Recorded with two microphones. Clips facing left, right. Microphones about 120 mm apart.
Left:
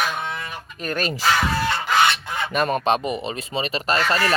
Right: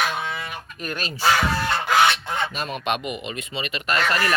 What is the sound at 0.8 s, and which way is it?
Speech, 45° left (ahead or behind).